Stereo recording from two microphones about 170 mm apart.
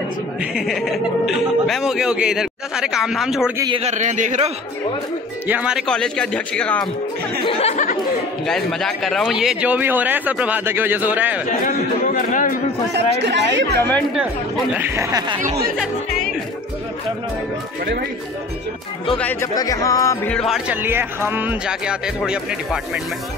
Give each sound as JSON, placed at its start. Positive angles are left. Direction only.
{"t": 0.4, "sound": "speech", "side_deg": 0}
{"t": 3.7, "sound": "speech", "side_deg": -40}
{"t": 5.5, "sound": "speech", "side_deg": -5}
{"t": 7.4, "sound": "chatter", "side_deg": 35}
{"t": 8.5, "sound": "speech", "side_deg": 5}
{"t": 11.6, "sound": "a man's voice", "side_deg": 50}
{"t": 12.9, "sound": "speech", "side_deg": -90}
{"t": 13.7, "sound": "speech", "side_deg": 10}
{"t": 14.7, "sound": "speech", "side_deg": -15}
{"t": 19.1, "sound": "speech", "side_deg": 10}
{"t": 19.5, "sound": "music", "side_deg": 20}
{"t": 20.2, "sound": "speech", "side_deg": 0}